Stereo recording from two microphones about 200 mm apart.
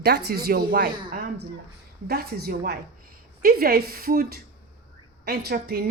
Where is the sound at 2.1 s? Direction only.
50° right (ahead or behind).